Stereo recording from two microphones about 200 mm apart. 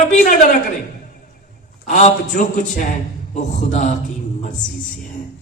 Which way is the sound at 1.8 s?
40° left (ahead or behind).